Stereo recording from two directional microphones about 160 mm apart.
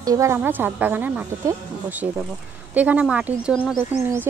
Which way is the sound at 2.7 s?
10° right (ahead or behind).